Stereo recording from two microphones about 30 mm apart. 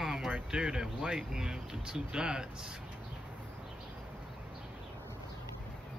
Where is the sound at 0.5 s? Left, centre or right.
Right.